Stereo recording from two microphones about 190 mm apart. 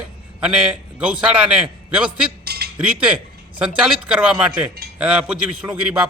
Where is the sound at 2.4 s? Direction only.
55° right (ahead or behind).